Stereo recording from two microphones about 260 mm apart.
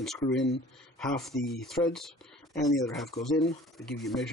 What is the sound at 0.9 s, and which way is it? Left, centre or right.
Speech, centre.